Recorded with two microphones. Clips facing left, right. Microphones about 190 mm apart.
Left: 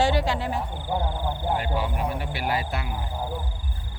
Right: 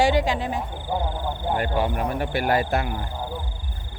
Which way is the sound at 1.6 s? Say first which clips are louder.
Right 4 dB; 55° right (ahead or behind).